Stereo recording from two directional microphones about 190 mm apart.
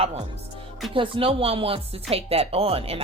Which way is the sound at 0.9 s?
30° right (ahead or behind).